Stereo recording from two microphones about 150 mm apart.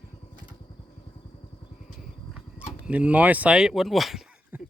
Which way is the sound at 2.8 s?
10° right (ahead or behind).